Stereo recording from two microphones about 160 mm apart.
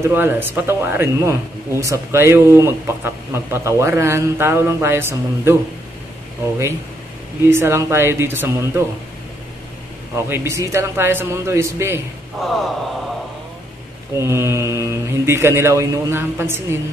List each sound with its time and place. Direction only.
0.0 s speech: 15° right (ahead or behind)
7.4 s speech: 15° right (ahead or behind)
10.1 s speech: 20° right (ahead or behind)
12.4 s a sound: centre (ahead or behind)
14.1 s speech: 15° right (ahead or behind)